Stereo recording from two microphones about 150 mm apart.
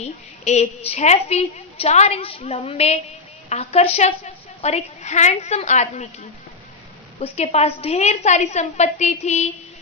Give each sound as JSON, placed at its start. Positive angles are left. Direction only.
{"t": 0.0, "sound": "a woman's voice", "side_deg": 45}
{"t": 7.2, "sound": "a woman's voice", "side_deg": 45}